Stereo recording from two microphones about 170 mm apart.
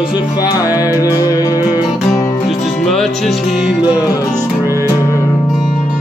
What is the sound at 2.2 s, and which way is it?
Music, 35° left (ahead or behind).